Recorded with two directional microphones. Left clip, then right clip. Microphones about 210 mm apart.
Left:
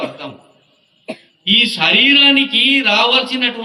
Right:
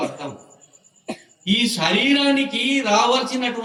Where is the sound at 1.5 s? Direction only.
20° left (ahead or behind).